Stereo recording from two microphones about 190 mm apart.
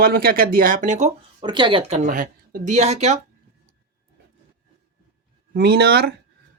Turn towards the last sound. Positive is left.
turn(degrees=-55)  # may be behind; listen again after turning